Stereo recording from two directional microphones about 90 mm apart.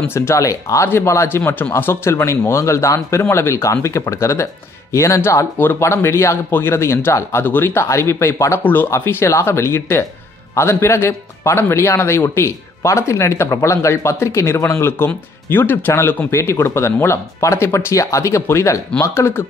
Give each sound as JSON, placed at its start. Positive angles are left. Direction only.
{"t": 0.0, "sound": "a man's voice", "side_deg": 30}